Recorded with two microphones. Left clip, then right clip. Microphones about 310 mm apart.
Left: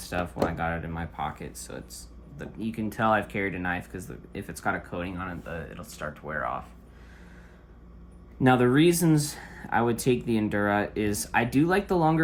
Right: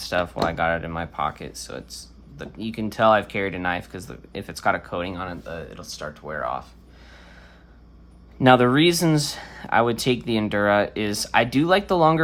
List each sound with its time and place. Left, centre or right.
0.1 s speech: centre
8.4 s speech: centre